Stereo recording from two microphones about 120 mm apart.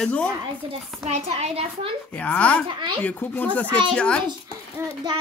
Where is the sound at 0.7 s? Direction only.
60° right (ahead or behind).